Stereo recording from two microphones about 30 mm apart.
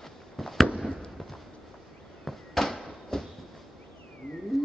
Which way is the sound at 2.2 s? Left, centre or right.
Centre.